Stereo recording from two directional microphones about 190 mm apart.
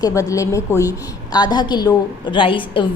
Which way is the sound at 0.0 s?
15° left (ahead or behind).